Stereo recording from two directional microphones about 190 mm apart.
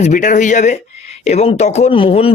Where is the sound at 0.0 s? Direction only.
40° left (ahead or behind).